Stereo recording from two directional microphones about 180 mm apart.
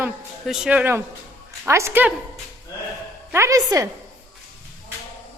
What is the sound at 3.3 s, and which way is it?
Speech, 15° right (ahead or behind).